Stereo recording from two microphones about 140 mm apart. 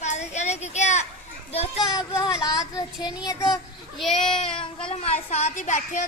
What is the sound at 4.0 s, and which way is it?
Speech, centre (ahead or behind).